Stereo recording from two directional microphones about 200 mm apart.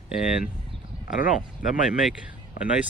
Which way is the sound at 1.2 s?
45° left (ahead or behind).